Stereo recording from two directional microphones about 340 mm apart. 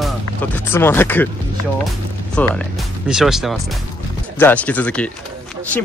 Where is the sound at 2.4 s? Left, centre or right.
Centre.